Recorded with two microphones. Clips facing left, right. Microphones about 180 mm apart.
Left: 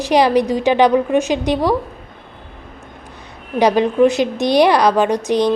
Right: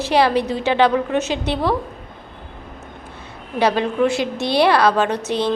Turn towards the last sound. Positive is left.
turn(degrees=15)  # may be behind; listen again after turning